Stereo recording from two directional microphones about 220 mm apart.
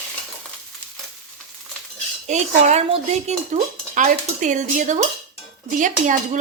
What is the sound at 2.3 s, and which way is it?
Dishes, 30° right (ahead or behind).